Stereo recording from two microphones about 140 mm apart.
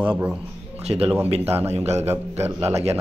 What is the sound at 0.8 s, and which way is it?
A man's voice, 45° right (ahead or behind).